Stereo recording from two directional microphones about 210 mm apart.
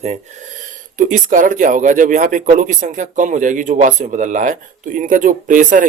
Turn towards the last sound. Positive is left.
turn(degrees=-40)  # may be behind; listen again after turning